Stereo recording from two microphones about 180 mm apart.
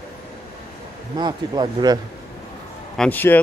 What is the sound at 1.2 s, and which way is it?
Speech, 25° right (ahead or behind).